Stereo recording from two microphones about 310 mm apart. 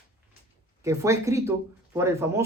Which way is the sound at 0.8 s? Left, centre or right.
Centre.